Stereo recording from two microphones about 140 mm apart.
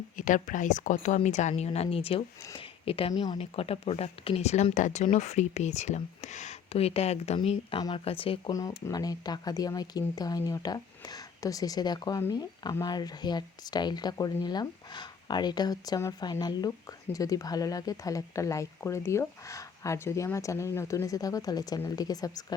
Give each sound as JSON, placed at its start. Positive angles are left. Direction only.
{"t": 0.2, "sound": "speech", "side_deg": 65}
{"t": 3.1, "sound": "speech", "side_deg": 30}
{"t": 3.3, "sound": "speech", "side_deg": 40}
{"t": 7.8, "sound": "speech", "side_deg": 30}
{"t": 8.0, "sound": "speech", "side_deg": 40}
{"t": 8.4, "sound": "speech", "side_deg": 25}